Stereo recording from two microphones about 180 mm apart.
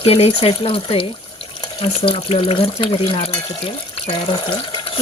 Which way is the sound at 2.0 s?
30° left (ahead or behind).